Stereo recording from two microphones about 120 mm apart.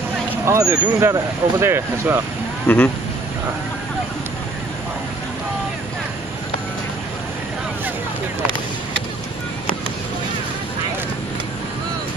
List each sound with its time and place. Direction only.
0.5 s speech: 20° right (ahead or behind)
2.7 s speech: 10° left (ahead or behind)